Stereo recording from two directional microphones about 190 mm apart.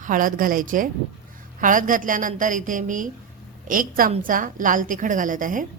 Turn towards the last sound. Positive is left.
turn(degrees=-45)  # may be behind; listen again after turning